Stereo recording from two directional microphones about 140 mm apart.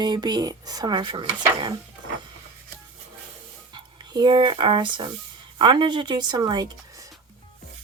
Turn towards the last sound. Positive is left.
turn(degrees=-25)  # may be behind; listen again after turning